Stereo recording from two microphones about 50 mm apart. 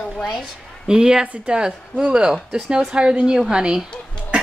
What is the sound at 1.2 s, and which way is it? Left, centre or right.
A woman's voice, right.